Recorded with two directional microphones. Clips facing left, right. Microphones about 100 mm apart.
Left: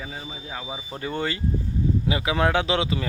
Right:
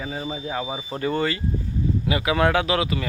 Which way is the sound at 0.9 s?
10° left (ahead or behind).